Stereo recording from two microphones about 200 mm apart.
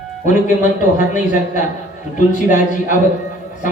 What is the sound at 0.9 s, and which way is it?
Speech, 40° left (ahead or behind).